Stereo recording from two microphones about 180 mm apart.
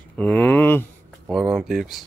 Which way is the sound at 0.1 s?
10° left (ahead or behind).